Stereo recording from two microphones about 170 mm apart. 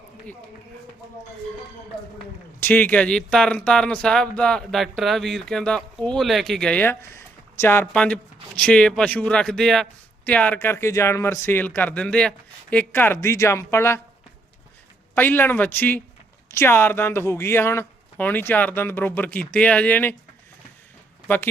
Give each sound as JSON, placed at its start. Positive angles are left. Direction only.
{"t": 2.6, "sound": "speech", "side_deg": 10}
{"t": 15.1, "sound": "speech", "side_deg": 10}